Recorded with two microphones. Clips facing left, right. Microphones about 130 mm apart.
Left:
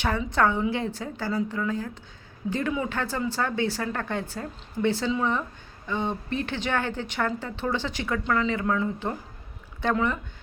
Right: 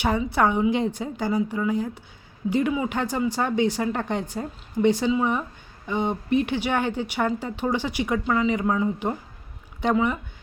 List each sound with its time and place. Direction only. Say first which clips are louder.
0.0 s speech: right 2 dB; 10° right (ahead or behind)